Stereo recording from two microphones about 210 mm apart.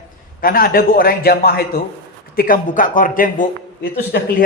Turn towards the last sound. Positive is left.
turn(degrees=50)  # may be behind; listen again after turning